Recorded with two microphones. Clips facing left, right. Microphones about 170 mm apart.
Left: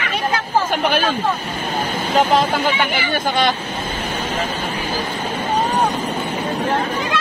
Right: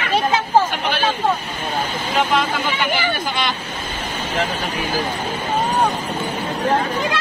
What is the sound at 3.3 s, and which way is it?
Speech, 50° left (ahead or behind).